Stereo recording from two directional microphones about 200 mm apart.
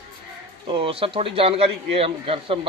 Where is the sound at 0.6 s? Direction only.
25° right (ahead or behind).